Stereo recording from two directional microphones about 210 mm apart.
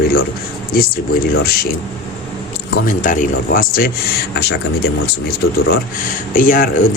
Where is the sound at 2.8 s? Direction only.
40° left (ahead or behind).